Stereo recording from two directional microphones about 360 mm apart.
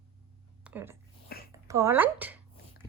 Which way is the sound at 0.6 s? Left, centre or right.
Centre.